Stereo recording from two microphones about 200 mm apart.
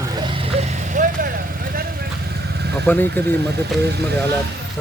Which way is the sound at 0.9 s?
45° right (ahead or behind).